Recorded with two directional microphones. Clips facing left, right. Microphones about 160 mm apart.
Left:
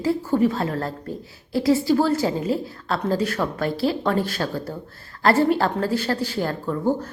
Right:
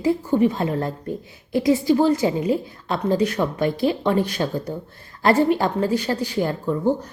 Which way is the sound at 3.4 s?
15° right (ahead or behind).